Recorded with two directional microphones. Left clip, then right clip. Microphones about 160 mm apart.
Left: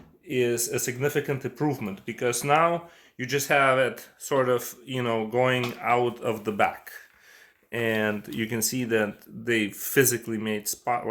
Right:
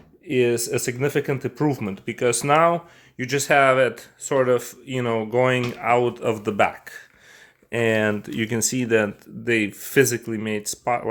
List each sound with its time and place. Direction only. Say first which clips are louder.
0.3 s speech: right 5 dB; 55° right (ahead or behind); by 11.1 s 40° right (ahead or behind)